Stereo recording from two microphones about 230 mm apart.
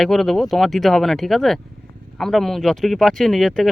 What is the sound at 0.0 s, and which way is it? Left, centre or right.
Speech, centre.